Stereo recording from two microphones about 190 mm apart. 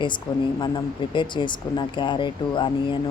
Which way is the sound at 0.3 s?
20° left (ahead or behind).